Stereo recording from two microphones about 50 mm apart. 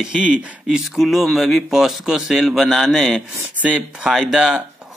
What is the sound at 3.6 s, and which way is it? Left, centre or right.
Speech, right.